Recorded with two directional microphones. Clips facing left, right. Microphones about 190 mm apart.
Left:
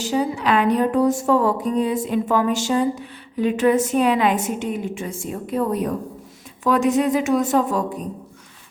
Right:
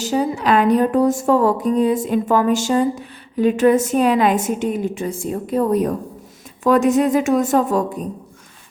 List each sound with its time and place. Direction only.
0.0 s a woman's voice: 45° right (ahead or behind)